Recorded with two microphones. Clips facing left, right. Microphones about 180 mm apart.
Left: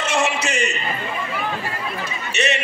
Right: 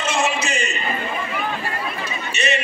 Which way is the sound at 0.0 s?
70° left (ahead or behind).